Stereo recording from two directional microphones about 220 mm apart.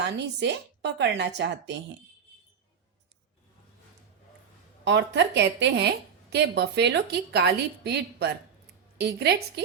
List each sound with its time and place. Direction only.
0.0 s a woman's voice: 50° right (ahead or behind)
4.9 s a woman's voice: 50° right (ahead or behind)